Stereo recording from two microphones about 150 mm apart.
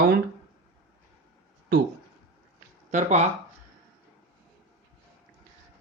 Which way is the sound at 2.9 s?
50° right (ahead or behind).